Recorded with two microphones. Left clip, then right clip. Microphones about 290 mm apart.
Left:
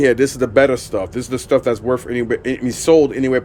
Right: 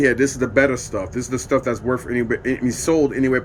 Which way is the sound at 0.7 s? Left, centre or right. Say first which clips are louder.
Left 5 dB; left.